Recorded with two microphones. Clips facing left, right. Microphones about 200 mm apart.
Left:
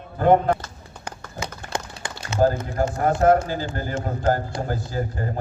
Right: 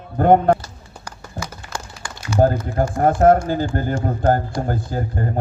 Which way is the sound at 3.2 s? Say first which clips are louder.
Right 3 dB; 50° right (ahead or behind).